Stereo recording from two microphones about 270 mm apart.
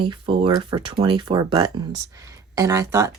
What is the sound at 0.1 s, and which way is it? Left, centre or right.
Speech, centre.